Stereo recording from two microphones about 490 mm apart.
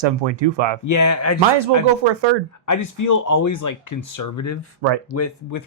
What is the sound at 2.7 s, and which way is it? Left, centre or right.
Speech, left.